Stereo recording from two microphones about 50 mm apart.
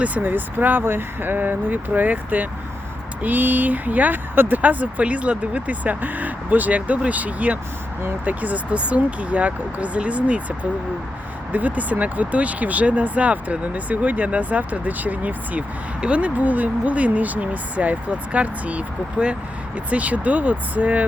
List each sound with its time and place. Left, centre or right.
0.2 s speech: right